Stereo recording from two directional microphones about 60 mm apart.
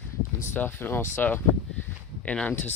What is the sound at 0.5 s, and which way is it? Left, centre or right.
Speech, left.